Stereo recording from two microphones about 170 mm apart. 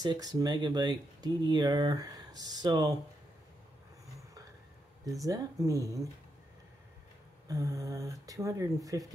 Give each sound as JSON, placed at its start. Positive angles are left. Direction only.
{"t": 0.0, "sound": "speech", "side_deg": -25}
{"t": 5.2, "sound": "speech", "side_deg": -20}
{"t": 7.4, "sound": "speech", "side_deg": -20}